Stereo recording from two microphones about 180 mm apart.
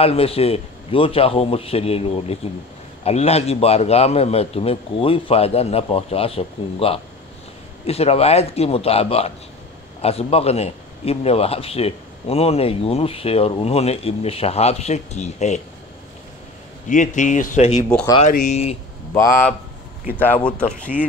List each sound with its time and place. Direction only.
0.0 s a man's voice: 35° left (ahead or behind)
16.9 s a man's voice: 45° left (ahead or behind)
19.1 s speech: 15° left (ahead or behind)